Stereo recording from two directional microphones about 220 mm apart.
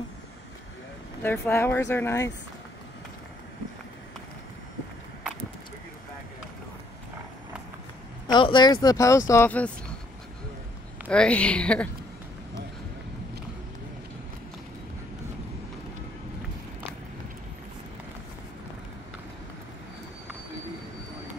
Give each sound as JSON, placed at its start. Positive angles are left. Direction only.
{"t": 1.2, "sound": "speech", "side_deg": 10}
{"t": 8.3, "sound": "speech", "side_deg": 20}
{"t": 11.1, "sound": "a woman's voice", "side_deg": 5}